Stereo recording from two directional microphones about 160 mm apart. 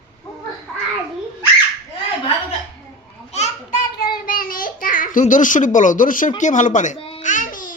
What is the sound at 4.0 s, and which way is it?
Child singing, 65° left (ahead or behind).